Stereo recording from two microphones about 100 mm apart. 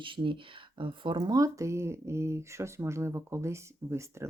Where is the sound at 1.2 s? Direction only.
35° right (ahead or behind).